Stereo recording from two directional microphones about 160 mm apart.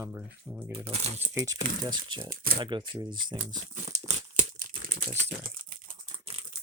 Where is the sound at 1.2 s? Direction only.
20° right (ahead or behind).